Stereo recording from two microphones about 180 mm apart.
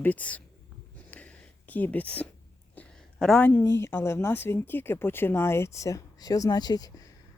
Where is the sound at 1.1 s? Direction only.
10° left (ahead or behind).